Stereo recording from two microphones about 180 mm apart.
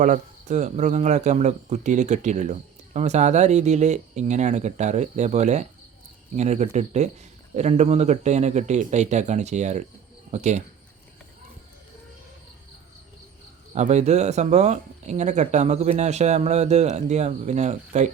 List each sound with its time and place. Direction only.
0.0 s speech: 40° right (ahead or behind)
13.7 s speech: 40° right (ahead or behind)